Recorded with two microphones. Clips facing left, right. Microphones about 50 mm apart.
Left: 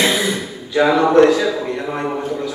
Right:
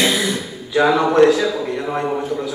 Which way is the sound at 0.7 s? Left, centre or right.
Centre.